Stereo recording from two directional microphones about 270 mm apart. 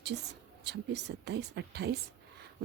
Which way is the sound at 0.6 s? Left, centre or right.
Right.